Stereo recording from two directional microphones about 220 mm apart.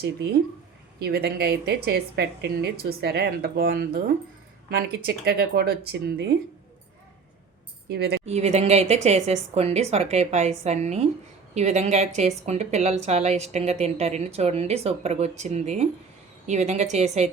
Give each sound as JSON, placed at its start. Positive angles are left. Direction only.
{"t": 0.9, "sound": "speech", "side_deg": -45}
{"t": 5.0, "sound": "speech", "side_deg": -45}
{"t": 7.9, "sound": "speech", "side_deg": -45}
{"t": 8.2, "sound": "a woman's voice", "side_deg": -30}